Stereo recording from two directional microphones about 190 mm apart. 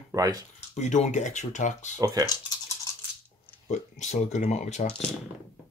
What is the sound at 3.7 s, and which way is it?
Speech, 40° left (ahead or behind).